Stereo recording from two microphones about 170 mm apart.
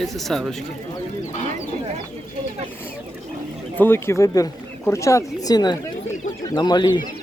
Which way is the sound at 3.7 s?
10° left (ahead or behind).